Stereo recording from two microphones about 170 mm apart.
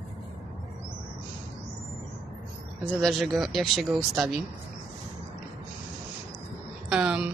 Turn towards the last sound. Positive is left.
turn(degrees=-5)  # may be behind; listen again after turning